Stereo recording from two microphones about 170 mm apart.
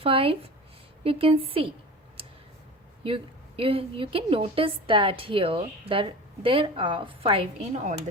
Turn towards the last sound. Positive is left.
turn(degrees=-35)  # may be behind; listen again after turning